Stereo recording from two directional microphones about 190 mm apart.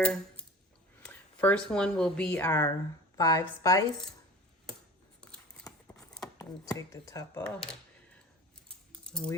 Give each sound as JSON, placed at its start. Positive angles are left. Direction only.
{"t": 0.0, "sound": "a sound", "side_deg": 5}
{"t": 1.0, "sound": "a woman's voice", "side_deg": 5}
{"t": 5.6, "sound": "a sound", "side_deg": 20}
{"t": 6.1, "sound": "chopping", "side_deg": 20}
{"t": 6.7, "sound": "speech", "side_deg": 15}
{"t": 7.4, "sound": "speech", "side_deg": 5}
{"t": 8.9, "sound": "typing", "side_deg": 5}